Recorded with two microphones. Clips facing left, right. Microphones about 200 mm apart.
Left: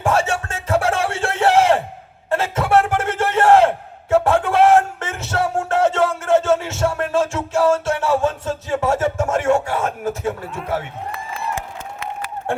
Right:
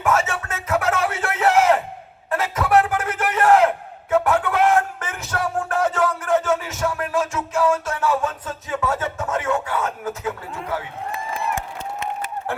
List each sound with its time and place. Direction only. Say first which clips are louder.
0.0 s music: left 2 dB; 30° left (ahead or behind)
2.3 s battle cry: left 2 dB; 30° left (ahead or behind)